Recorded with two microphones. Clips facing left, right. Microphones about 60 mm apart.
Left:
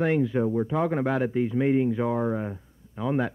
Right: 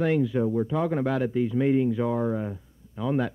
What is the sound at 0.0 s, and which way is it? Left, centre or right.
A man's voice, left.